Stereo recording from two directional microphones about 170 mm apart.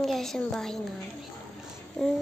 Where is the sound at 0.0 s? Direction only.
Centre (ahead or behind).